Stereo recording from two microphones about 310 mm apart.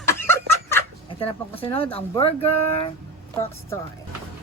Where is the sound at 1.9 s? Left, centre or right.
Centre.